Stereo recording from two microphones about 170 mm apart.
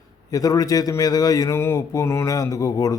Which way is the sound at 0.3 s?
20° left (ahead or behind).